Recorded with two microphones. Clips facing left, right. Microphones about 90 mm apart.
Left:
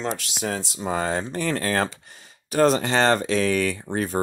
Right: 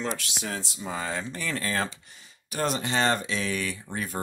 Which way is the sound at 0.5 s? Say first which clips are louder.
Left 7 dB; 50° left (ahead or behind).